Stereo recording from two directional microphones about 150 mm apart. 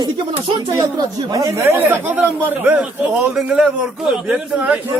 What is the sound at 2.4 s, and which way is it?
A man's voice, 10° right (ahead or behind).